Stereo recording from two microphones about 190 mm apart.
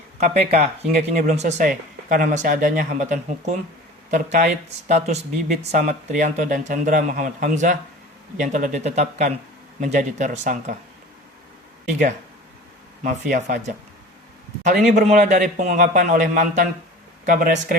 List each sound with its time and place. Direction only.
0.2 s speech: 35° right (ahead or behind)
13.3 s speech: 45° right (ahead or behind)
14.9 s speech: 40° right (ahead or behind)